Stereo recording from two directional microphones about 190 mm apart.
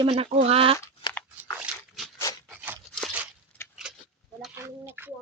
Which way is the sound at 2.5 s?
10° right (ahead or behind).